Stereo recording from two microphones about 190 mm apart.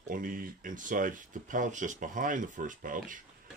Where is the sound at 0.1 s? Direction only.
45° right (ahead or behind).